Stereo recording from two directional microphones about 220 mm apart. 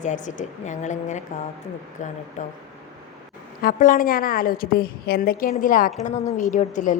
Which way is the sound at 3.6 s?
40° left (ahead or behind).